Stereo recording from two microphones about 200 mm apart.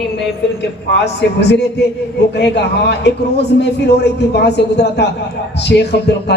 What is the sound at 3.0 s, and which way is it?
A man's voice, 55° left (ahead or behind).